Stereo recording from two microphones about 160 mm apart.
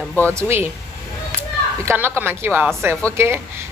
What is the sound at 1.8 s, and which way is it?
A woman's voice, 15° right (ahead or behind).